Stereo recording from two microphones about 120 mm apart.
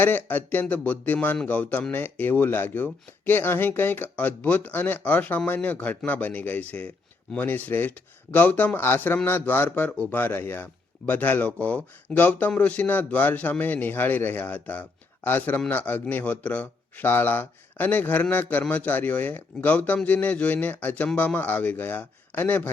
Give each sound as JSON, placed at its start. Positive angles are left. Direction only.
{"t": 0.0, "sound": "speech", "side_deg": 15}